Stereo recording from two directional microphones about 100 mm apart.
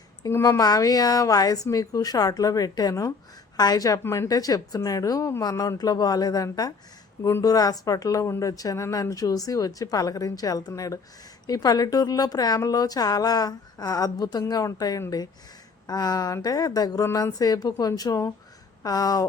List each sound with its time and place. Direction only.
0.3 s a woman's voice: 30° left (ahead or behind)
4.0 s speech: 25° left (ahead or behind)
4.3 s a woman's voice: 40° left (ahead or behind)
17.0 s a woman's voice: 25° left (ahead or behind)